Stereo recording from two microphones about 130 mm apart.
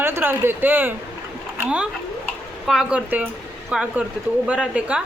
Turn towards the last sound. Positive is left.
turn(degrees=-10)  # may be behind; listen again after turning